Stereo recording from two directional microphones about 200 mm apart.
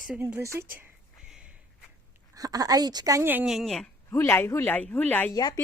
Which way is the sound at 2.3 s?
20° right (ahead or behind).